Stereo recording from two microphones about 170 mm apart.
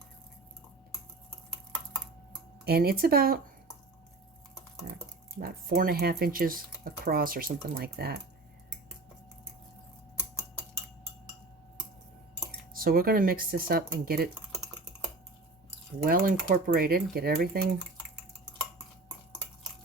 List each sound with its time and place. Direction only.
2.6 s speech: 65° right (ahead or behind)
5.4 s speech: 60° right (ahead or behind)
12.7 s speech: 60° right (ahead or behind)
16.0 s speech: 55° right (ahead or behind)